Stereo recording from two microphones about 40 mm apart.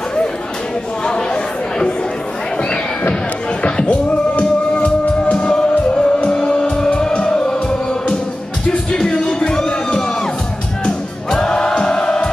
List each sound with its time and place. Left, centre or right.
1.0 s chatter: left
2.7 s a sound: left
3.6 s music: left
8.6 s music: centre